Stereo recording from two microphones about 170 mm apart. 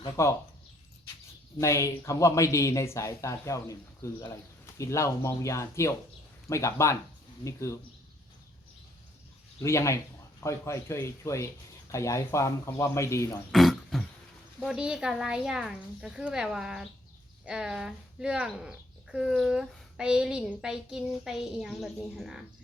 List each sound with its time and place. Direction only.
0.0 s speech: 15° left (ahead or behind)
1.5 s speech: 20° left (ahead or behind)
9.6 s speech: 15° left (ahead or behind)
13.5 s throat clearing: centre (ahead or behind)
14.6 s speech: 5° right (ahead or behind)